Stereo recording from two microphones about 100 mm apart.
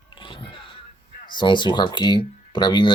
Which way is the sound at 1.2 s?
50° left (ahead or behind).